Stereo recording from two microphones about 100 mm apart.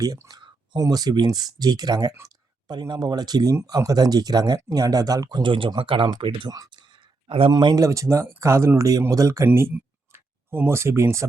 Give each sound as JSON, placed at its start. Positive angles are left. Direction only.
{"t": 0.3, "sound": "speech", "side_deg": -40}
{"t": 5.4, "sound": "speech", "side_deg": -60}
{"t": 6.5, "sound": "speech", "side_deg": -40}
{"t": 7.3, "sound": "speech", "side_deg": -80}
{"t": 7.5, "sound": "speech", "side_deg": -45}
{"t": 7.8, "sound": "speech", "side_deg": -30}
{"t": 9.5, "sound": "speech", "side_deg": -20}